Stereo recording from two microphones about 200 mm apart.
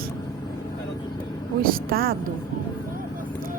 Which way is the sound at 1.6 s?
45° right (ahead or behind).